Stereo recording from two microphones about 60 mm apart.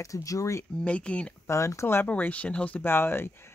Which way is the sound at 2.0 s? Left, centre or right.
Left.